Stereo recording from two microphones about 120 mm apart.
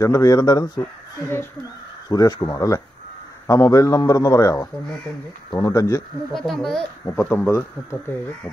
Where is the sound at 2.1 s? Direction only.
30° left (ahead or behind).